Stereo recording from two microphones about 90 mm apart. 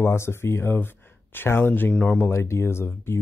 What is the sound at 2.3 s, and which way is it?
Speech, 30° left (ahead or behind).